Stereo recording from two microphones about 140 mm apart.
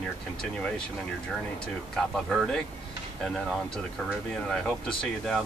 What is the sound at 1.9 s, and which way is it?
Speech, 5° left (ahead or behind).